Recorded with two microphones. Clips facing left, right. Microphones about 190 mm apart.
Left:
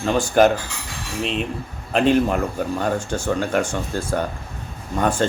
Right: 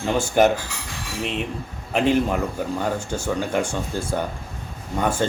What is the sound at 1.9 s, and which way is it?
Speech, 15° right (ahead or behind).